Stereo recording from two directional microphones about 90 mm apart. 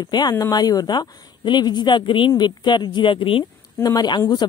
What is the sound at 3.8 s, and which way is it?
Speech, 55° left (ahead or behind).